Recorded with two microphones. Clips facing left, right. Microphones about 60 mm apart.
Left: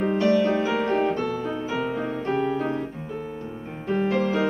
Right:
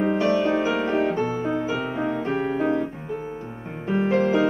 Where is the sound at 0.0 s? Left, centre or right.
Centre.